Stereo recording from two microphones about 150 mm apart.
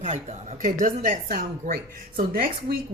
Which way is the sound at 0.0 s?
50° right (ahead or behind).